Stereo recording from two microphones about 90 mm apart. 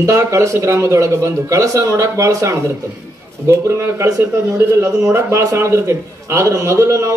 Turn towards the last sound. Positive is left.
turn(degrees=-30)  # may be behind; listen again after turning